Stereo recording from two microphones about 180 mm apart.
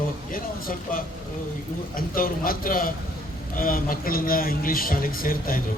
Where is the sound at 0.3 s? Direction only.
50° left (ahead or behind).